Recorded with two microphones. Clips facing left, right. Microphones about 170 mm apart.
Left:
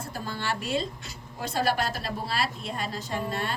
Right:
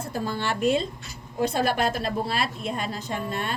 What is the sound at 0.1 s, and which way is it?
A woman's voice, 50° right (ahead or behind).